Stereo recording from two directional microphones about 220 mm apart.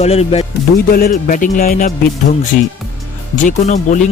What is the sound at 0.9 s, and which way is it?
Speech, 40° left (ahead or behind).